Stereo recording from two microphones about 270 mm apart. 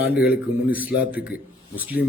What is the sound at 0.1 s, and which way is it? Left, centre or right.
Speech, left.